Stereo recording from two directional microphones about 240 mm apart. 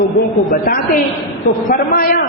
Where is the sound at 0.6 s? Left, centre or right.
Left.